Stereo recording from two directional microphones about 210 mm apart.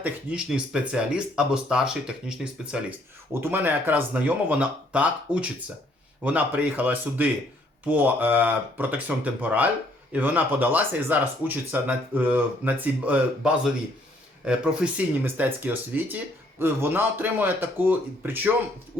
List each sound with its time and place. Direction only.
0.0 s speech: 5° right (ahead or behind)